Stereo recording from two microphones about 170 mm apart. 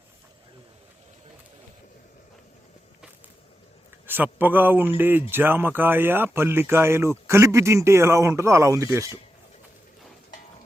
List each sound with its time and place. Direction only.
4.0 s speech: 10° right (ahead or behind)